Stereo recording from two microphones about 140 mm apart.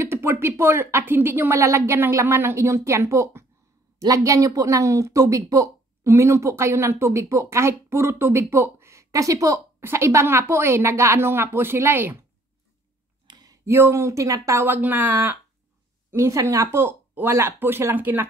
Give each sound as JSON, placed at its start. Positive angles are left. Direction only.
{"t": 0.0, "sound": "speech", "side_deg": -20}
{"t": 13.3, "sound": "speech", "side_deg": -25}